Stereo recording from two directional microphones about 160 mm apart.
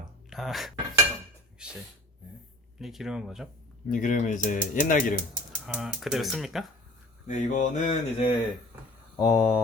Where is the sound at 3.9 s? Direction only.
55° left (ahead or behind).